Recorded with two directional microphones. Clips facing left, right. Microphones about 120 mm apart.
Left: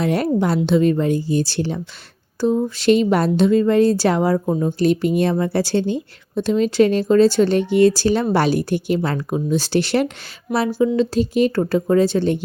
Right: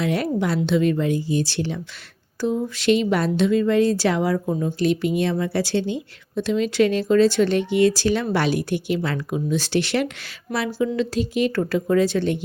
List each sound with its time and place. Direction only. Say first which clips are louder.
0.0 s speech: left 4 dB; 40° left (ahead or behind)
10.7 s speech: left 5 dB; 20° left (ahead or behind)
10.9 s speech: left 5 dB; 35° left (ahead or behind)